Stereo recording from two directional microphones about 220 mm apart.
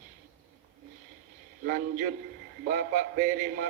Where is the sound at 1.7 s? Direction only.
35° right (ahead or behind).